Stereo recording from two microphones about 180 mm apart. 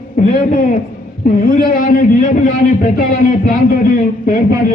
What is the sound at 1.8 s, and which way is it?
Speech, 45° left (ahead or behind).